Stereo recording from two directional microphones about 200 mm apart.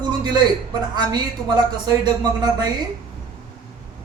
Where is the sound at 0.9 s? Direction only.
20° right (ahead or behind).